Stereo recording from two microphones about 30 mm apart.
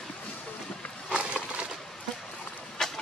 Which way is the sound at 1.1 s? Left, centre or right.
Right.